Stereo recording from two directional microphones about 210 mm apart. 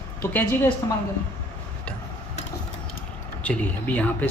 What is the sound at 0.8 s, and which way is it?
Speech, 15° left (ahead or behind).